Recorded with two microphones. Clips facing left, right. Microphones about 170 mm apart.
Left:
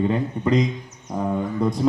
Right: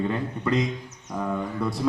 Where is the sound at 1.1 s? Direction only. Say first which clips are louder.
Left 4 dB; 30° left (ahead or behind).